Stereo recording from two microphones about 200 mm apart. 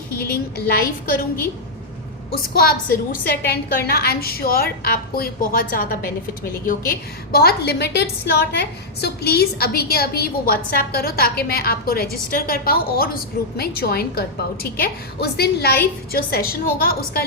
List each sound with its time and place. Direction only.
0.2 s a woman's voice: 50° left (ahead or behind)
2.3 s a woman's voice: 50° left (ahead or behind)